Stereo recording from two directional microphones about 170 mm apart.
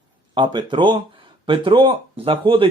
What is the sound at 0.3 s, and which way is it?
Speech, 30° right (ahead or behind).